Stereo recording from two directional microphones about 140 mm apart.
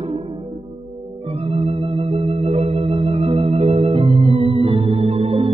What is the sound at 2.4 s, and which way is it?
Organ, 45° right (ahead or behind).